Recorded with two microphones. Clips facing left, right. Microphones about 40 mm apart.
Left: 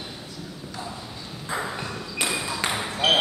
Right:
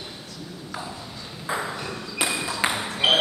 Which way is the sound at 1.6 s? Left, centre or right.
Centre.